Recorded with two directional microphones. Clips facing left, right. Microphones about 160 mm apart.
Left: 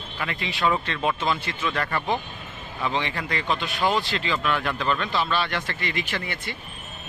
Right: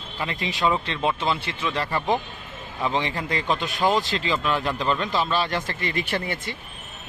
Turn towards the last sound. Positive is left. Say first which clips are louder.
# right 3 dB
turn(degrees=-35)  # may be behind; listen again after turning